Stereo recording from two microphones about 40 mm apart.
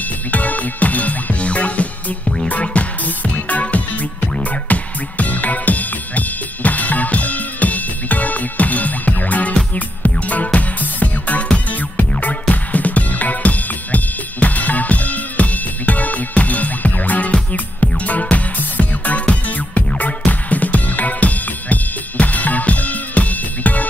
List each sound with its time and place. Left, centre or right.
0.3 s music: left
11.4 s music: left
12.2 s music: left